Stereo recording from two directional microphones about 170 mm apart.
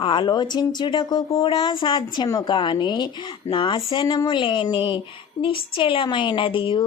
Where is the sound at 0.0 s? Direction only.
30° left (ahead or behind).